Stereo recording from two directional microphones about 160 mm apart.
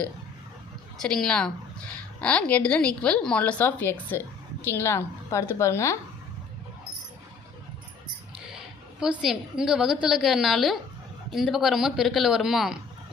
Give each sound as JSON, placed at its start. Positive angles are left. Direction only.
{"t": 1.0, "sound": "a woman's voice", "side_deg": 5}
{"t": 9.0, "sound": "a woman's voice", "side_deg": -5}